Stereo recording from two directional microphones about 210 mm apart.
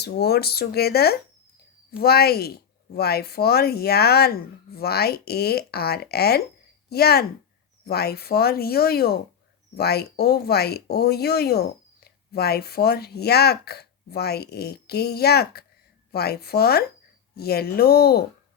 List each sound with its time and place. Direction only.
0.0 s speech: 50° left (ahead or behind)